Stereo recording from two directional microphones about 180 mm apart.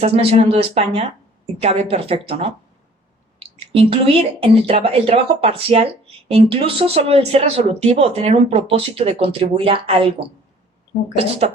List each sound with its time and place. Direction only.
0.0 s speech: 35° right (ahead or behind)
3.4 s speech: 30° right (ahead or behind)
10.2 s speech: 65° right (ahead or behind)
11.2 s speech: 35° right (ahead or behind)